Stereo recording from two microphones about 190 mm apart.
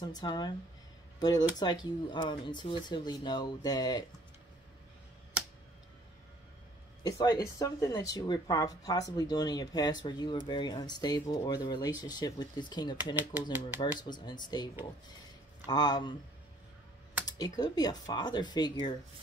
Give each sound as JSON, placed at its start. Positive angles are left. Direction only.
{"t": 0.0, "sound": "speech", "side_deg": 20}
{"t": 1.6, "sound": "speech", "side_deg": 20}
{"t": 7.0, "sound": "speech", "side_deg": 20}
{"t": 12.9, "sound": "speech", "side_deg": -10}
{"t": 13.7, "sound": "speech", "side_deg": 25}
{"t": 17.3, "sound": "speech", "side_deg": 20}